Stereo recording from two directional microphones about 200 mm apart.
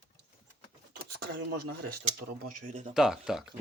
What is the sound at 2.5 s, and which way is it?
Speech, 40° right (ahead or behind).